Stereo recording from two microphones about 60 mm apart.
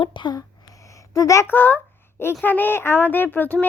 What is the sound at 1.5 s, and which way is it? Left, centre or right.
Speech, left.